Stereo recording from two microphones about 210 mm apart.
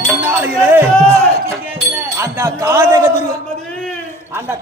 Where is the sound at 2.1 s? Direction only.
15° right (ahead or behind).